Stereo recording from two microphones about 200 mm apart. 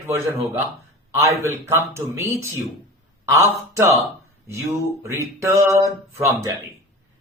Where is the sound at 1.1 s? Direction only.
15° right (ahead or behind).